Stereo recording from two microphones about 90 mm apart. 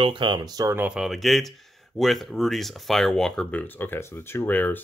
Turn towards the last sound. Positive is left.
turn(degrees=20)  # may be behind; listen again after turning